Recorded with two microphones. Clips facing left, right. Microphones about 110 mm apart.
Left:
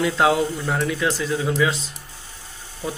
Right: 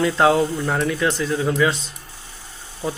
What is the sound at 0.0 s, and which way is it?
A man's voice, 5° left (ahead or behind).